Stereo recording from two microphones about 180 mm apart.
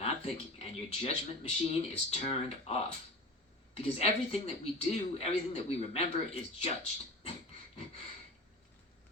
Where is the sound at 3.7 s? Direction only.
35° left (ahead or behind).